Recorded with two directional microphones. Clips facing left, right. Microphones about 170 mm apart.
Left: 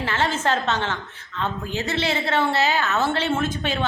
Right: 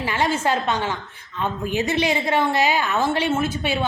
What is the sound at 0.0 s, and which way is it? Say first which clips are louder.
A woman's voice: right 2 dB; 15° right (ahead or behind).